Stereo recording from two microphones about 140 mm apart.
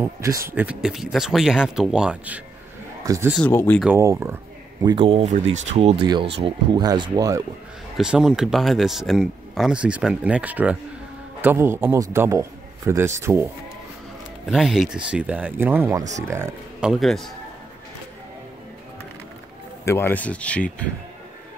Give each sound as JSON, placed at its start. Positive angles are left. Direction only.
{"t": 0.0, "sound": "speech", "side_deg": -20}
{"t": 0.5, "sound": "speech", "side_deg": -10}
{"t": 3.3, "sound": "speech", "side_deg": 10}
{"t": 4.0, "sound": "speech", "side_deg": -20}
{"t": 4.8, "sound": "speech", "side_deg": -40}
{"t": 5.3, "sound": "speech", "side_deg": -50}
{"t": 8.0, "sound": "a man's voice", "side_deg": -5}
{"t": 14.5, "sound": "a man's voice", "side_deg": -5}
{"t": 16.8, "sound": "speech", "side_deg": 0}
{"t": 19.8, "sound": "speech", "side_deg": 20}